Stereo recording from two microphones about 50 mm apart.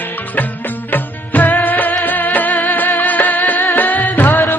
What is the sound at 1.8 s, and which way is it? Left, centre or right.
Music, left.